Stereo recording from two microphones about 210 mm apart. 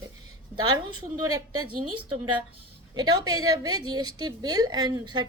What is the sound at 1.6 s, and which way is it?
Speech, 90° right.